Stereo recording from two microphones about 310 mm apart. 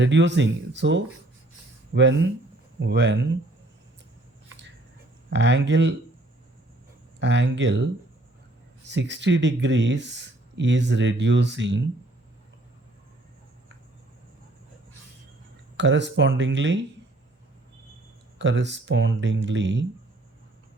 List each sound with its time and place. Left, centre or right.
0.0 s speech: right
5.3 s speech: right
7.2 s speech: right
8.9 s speech: right
15.8 s speech: right
18.3 s speech: right